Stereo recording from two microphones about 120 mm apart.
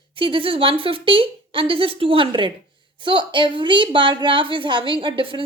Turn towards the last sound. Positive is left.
turn(degrees=-45)  # may be behind; listen again after turning